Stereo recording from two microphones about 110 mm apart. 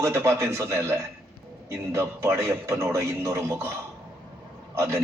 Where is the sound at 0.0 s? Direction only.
25° right (ahead or behind).